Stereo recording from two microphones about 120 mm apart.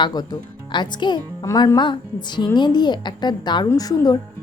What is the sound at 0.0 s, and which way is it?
A woman's voice, 35° left (ahead or behind).